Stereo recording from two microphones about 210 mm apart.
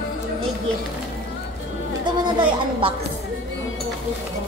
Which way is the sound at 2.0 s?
20° right (ahead or behind).